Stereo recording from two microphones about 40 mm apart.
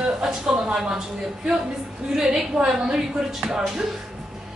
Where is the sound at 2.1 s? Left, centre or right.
Centre.